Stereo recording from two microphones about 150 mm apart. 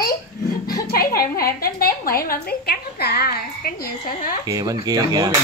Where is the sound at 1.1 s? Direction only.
90° left; by 4.4 s 65° left (ahead or behind).